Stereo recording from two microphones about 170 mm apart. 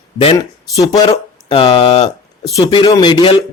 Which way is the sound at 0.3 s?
20° left (ahead or behind).